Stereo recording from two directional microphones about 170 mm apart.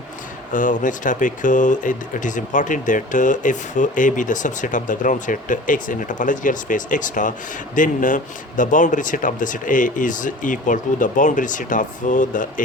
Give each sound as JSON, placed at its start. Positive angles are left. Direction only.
{"t": 0.5, "sound": "speech", "side_deg": 50}